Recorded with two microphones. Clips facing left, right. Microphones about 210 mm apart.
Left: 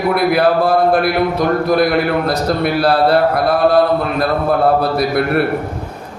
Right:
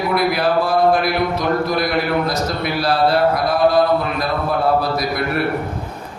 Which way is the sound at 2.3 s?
60° left (ahead or behind).